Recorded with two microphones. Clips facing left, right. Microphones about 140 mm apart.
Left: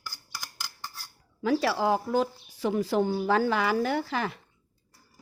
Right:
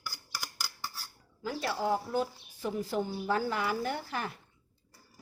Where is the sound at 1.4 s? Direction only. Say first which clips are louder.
Left 8 dB; 90° left.